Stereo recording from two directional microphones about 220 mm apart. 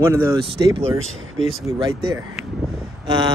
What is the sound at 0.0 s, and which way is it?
Speech, 10° right (ahead or behind).